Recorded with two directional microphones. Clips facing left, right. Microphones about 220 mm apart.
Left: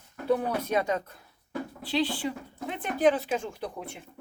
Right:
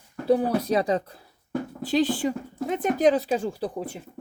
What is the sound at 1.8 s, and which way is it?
Speech, 45° right (ahead or behind).